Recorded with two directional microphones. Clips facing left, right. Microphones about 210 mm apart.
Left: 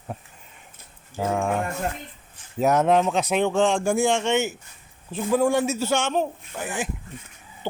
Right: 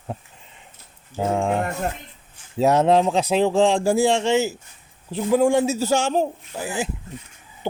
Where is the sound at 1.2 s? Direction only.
25° right (ahead or behind).